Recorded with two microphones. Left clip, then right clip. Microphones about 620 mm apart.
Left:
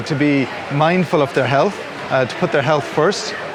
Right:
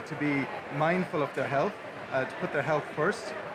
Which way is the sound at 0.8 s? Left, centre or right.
Left.